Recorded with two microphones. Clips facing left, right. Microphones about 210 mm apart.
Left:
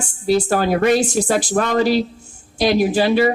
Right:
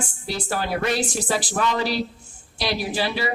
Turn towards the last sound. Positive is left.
turn(degrees=45)  # may be behind; listen again after turning